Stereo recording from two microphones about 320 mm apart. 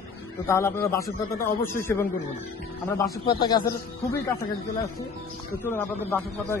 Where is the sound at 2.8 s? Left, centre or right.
Centre.